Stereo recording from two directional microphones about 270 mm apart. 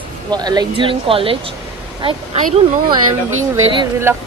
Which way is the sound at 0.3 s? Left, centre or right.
Centre.